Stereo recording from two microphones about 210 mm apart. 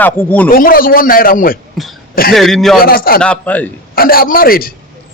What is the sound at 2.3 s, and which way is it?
Speech, centre (ahead or behind).